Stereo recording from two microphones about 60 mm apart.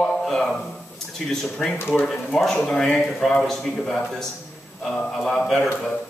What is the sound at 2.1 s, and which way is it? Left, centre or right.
A man's voice, centre.